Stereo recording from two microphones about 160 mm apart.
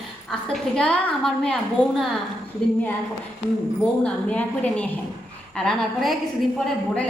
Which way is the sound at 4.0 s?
5° left (ahead or behind).